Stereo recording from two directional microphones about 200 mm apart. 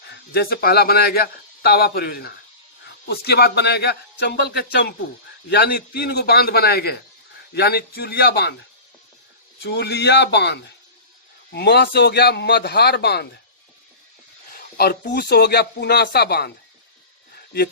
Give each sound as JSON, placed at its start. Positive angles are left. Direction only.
{"t": 0.1, "sound": "a man's voice", "side_deg": 50}
{"t": 9.6, "sound": "a man's voice", "side_deg": 55}
{"t": 14.8, "sound": "speech", "side_deg": 50}